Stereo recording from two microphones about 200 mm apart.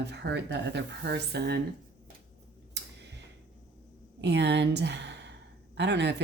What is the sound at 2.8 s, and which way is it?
Tick, 60° right (ahead or behind).